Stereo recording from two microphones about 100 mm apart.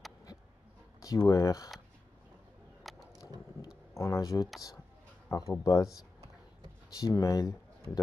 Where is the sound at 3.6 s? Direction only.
30° left (ahead or behind).